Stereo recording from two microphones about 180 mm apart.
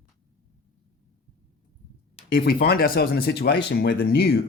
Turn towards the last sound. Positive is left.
turn(degrees=70)  # may be behind; listen again after turning